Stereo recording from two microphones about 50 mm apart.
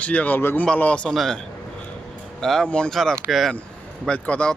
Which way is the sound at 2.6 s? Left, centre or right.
Centre.